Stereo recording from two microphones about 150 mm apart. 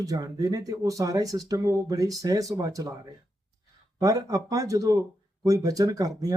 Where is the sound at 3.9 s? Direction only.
25° right (ahead or behind).